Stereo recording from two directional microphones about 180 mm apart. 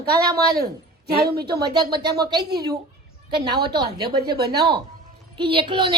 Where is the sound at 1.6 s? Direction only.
25° right (ahead or behind).